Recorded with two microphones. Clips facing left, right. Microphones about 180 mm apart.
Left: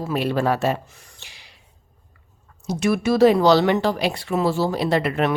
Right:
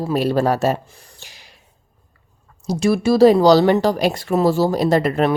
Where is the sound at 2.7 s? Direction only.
35° right (ahead or behind).